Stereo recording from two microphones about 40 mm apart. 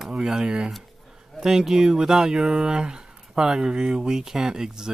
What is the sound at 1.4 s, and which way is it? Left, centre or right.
Speech, centre.